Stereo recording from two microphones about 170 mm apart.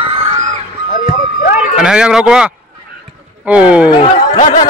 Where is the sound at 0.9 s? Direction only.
50° left (ahead or behind).